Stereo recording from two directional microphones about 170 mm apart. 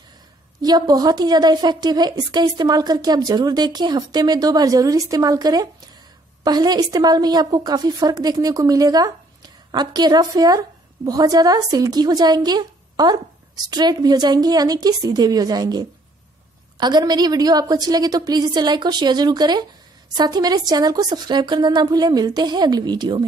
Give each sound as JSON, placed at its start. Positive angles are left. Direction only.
{"t": 0.6, "sound": "a woman's voice", "side_deg": -25}